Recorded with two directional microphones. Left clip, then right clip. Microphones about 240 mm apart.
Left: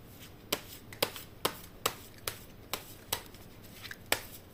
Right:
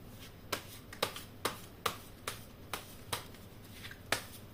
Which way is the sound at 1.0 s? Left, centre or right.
Left.